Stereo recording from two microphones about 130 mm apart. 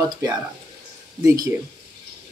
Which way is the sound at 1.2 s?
25° right (ahead or behind).